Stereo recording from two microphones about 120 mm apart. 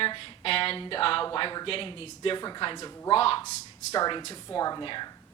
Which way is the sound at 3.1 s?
55° left (ahead or behind).